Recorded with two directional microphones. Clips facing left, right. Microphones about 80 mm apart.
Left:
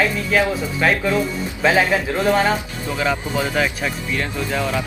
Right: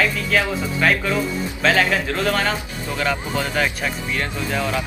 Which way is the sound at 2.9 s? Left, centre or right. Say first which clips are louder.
Left 2 dB; centre.